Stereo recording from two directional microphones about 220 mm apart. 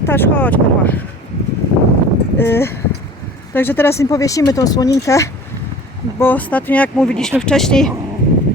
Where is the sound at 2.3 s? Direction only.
10° left (ahead or behind).